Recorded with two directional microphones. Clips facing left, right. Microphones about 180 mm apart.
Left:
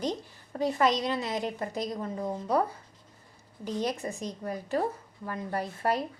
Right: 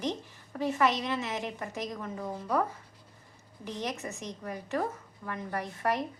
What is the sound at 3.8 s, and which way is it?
A woman's voice, 30° left (ahead or behind).